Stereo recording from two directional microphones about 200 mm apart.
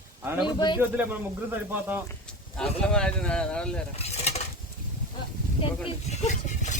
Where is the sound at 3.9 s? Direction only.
30° left (ahead or behind).